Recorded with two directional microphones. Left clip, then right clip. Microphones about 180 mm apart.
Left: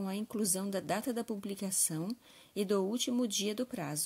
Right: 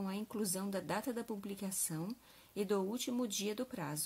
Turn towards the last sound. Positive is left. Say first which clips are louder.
# left 4 dB
turn(degrees=30)  # may be behind; listen again after turning